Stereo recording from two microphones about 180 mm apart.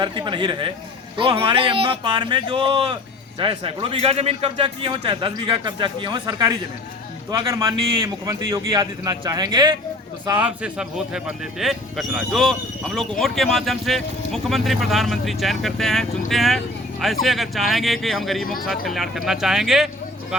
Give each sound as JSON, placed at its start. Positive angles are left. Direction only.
{"t": 0.0, "sound": "a man's voice", "side_deg": -25}
{"t": 10.2, "sound": "speech", "side_deg": -10}